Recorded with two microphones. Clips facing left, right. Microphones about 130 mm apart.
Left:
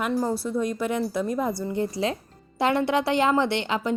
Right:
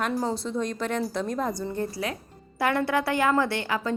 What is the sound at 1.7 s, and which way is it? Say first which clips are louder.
A woman's voice: left 4 dB; 20° left (ahead or behind).